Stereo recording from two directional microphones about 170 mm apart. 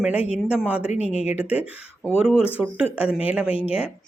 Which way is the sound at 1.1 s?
40° left (ahead or behind).